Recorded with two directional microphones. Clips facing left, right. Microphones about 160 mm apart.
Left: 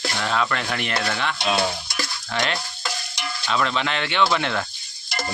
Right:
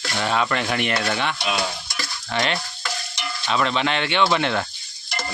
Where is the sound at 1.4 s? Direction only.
30° left (ahead or behind).